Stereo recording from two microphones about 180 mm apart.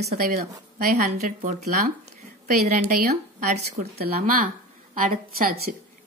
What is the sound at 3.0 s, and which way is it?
Speech, 50° right (ahead or behind).